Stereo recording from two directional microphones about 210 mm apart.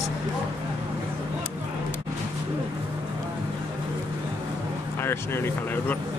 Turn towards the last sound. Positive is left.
turn(degrees=10)  # may be behind; listen again after turning